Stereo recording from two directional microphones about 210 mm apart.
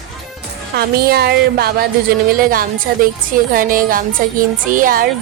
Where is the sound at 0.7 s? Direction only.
50° right (ahead or behind).